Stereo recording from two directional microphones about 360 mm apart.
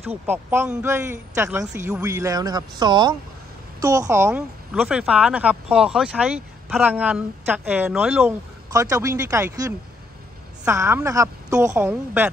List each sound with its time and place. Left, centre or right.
0.1 s speech: centre